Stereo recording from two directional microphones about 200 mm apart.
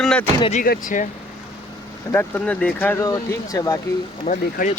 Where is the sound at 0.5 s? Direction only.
45° left (ahead or behind).